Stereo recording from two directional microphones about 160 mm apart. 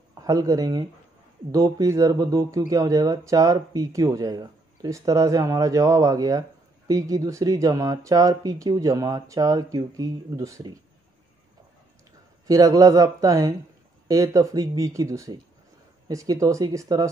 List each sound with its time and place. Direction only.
0.1 s speech: 20° right (ahead or behind)
12.4 s speech: 20° right (ahead or behind)